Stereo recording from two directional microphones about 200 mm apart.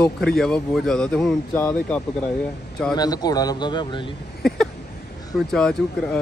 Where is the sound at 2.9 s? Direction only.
20° left (ahead or behind).